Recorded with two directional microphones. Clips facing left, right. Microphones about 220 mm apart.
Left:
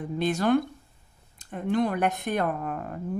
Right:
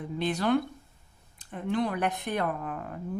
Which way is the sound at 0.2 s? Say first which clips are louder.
Left 3 dB; 45° left (ahead or behind).